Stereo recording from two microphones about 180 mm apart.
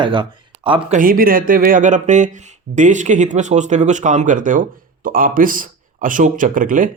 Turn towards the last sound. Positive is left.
turn(degrees=-50)  # may be behind; listen again after turning